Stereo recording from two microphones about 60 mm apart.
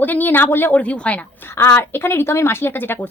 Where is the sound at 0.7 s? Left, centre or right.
Left.